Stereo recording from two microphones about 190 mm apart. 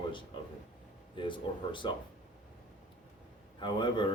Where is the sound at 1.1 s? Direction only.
25° left (ahead or behind).